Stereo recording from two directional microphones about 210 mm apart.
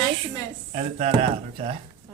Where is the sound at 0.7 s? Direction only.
30° right (ahead or behind).